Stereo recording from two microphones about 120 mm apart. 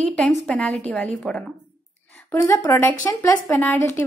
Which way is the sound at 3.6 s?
15° left (ahead or behind).